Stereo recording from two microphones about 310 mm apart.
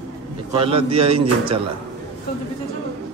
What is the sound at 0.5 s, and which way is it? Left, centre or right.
A man's voice, centre.